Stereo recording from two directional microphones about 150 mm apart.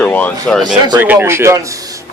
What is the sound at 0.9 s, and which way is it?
Speech, 10° right (ahead or behind).